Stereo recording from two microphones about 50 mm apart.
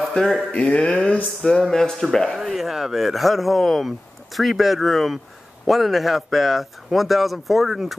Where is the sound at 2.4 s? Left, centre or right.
Centre.